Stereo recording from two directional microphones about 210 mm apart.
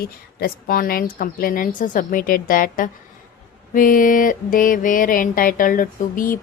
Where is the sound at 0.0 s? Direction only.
45° left (ahead or behind).